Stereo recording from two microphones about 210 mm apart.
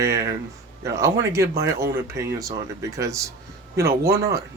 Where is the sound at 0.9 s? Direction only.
15° right (ahead or behind).